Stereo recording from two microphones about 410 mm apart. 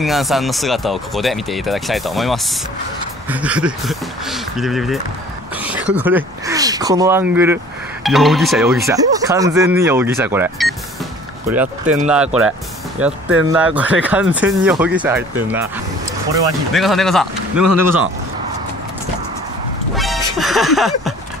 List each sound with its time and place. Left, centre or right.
0.0 s speech: centre
13.0 s speech: centre
17.6 s speech: right
20.0 s music: centre